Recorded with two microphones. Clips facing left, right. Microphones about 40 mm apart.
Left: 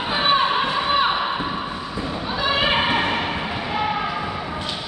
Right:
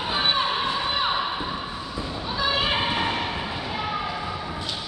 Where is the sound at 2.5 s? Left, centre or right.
Left.